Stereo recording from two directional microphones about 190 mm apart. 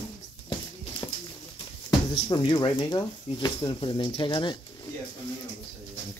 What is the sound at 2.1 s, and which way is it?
Speech, 25° left (ahead or behind).